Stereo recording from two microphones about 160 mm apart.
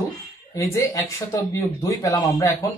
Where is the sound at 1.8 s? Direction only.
20° left (ahead or behind).